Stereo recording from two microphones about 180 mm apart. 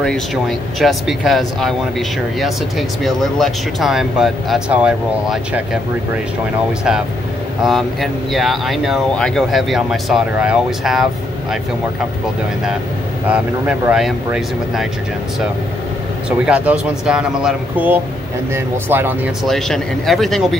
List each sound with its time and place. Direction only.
0.0 s speech: 5° left (ahead or behind)
7.6 s speech: centre (ahead or behind)
13.3 s speech: 5° right (ahead or behind)
16.3 s speech: 5° right (ahead or behind)
19.4 s speech: centre (ahead or behind)